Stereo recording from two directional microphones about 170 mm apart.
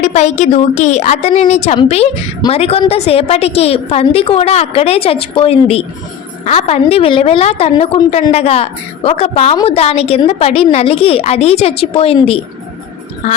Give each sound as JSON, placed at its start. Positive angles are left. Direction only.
{"t": 0.0, "sound": "a woman's voice", "side_deg": 45}